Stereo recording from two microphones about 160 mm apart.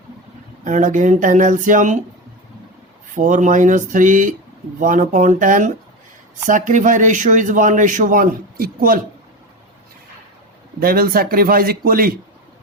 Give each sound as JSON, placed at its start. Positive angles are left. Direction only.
{"t": 0.6, "sound": "a man's voice", "side_deg": -50}
{"t": 3.2, "sound": "a man's voice", "side_deg": -55}
{"t": 10.8, "sound": "a man's voice", "side_deg": -70}